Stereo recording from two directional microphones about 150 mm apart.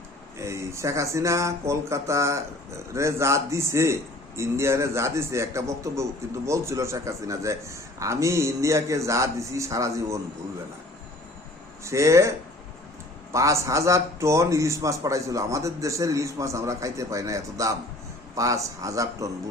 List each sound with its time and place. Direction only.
0.3 s a man's voice: 20° right (ahead or behind)
11.8 s a man's voice: 20° right (ahead or behind)
13.3 s a man's voice: 20° right (ahead or behind)